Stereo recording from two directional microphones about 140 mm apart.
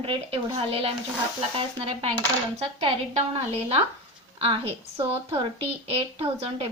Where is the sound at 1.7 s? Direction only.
40° right (ahead or behind).